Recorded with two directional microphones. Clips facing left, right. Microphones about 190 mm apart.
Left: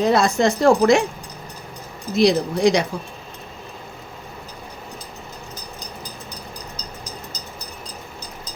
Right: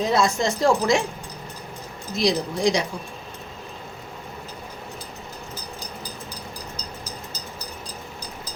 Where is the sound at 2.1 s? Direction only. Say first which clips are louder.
Left 6 dB; 60° left (ahead or behind).